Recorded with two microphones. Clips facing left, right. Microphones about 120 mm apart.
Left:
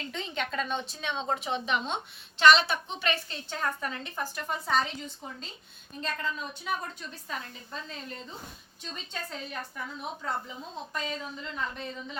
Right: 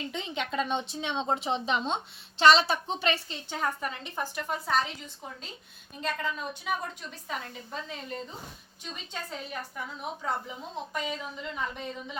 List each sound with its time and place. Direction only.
0.1 s a woman's voice: 15° right (ahead or behind)
3.5 s a woman's voice: 10° right (ahead or behind)
4.4 s a woman's voice: 5° right (ahead or behind)
6.0 s a woman's voice: 10° right (ahead or behind)